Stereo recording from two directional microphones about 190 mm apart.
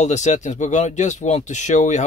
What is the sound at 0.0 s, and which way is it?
Speech, 40° left (ahead or behind).